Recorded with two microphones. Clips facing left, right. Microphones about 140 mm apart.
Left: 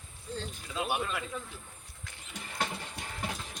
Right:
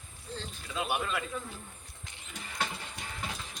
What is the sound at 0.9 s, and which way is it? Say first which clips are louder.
Speech: right 1 dB; 25° left (ahead or behind).